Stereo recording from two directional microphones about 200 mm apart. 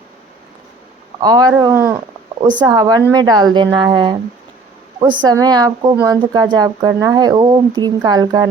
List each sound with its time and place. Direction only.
1.2 s speech: 20° right (ahead or behind)
5.2 s speech: 20° right (ahead or behind)